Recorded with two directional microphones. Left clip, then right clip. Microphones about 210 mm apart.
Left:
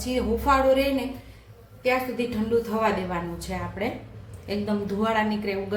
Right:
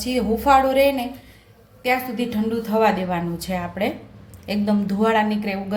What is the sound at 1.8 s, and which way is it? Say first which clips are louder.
A woman's voice: right 2 dB; 50° right (ahead or behind).